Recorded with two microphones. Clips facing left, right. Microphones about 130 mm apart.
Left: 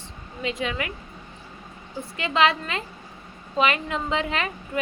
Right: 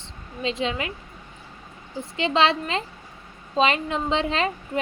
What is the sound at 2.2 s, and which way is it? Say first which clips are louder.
A woman's voice: right 1 dB; 25° right (ahead or behind).